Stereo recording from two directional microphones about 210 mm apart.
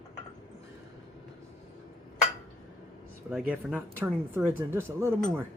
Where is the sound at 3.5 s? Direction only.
5° right (ahead or behind).